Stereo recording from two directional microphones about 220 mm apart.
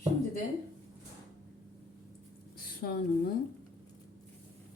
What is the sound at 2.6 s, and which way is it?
Speech, 45° left (ahead or behind).